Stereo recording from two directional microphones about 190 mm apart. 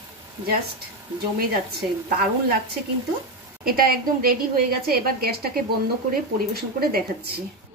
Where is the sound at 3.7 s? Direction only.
50° right (ahead or behind).